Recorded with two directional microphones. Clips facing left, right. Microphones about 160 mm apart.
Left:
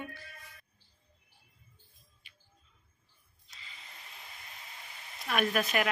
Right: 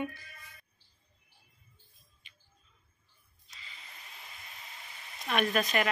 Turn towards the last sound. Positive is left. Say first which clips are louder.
# right 1 dB
turn(degrees=5)  # may be behind; listen again after turning